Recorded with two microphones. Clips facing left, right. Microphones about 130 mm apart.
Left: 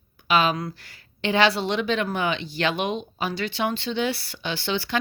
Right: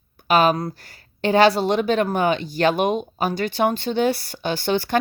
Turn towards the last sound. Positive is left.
turn(degrees=-45)  # may be behind; listen again after turning